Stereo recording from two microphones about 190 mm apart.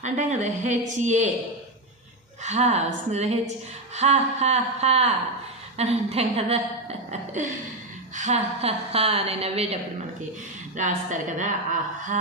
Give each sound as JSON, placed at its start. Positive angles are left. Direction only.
{"t": 0.0, "sound": "a woman's voice", "side_deg": -40}
{"t": 2.4, "sound": "a woman's voice", "side_deg": -35}
{"t": 10.8, "sound": "a woman's voice", "side_deg": -40}